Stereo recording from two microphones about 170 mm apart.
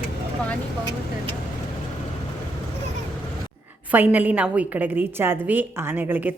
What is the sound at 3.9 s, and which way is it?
A woman's voice, 10° right (ahead or behind).